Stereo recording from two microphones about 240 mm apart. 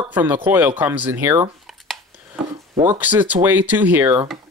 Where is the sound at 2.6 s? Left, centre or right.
Centre.